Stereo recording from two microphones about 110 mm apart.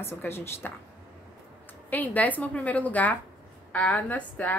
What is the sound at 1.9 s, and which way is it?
A woman's voice, 15° left (ahead or behind).